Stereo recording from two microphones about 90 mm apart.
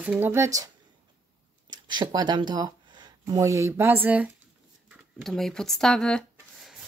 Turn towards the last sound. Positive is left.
turn(degrees=5)  # may be behind; listen again after turning